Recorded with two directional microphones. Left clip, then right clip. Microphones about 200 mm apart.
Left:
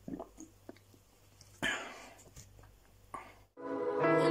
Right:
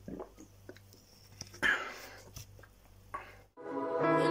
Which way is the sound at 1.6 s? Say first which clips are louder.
Right 5 dB; 5° left (ahead or behind).